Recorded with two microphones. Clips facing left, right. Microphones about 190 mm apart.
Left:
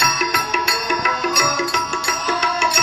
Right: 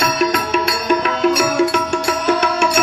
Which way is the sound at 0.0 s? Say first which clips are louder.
Right 6 dB; 55° right (ahead or behind).